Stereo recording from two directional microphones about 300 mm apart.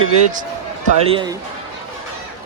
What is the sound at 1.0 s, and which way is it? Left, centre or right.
Speech, centre.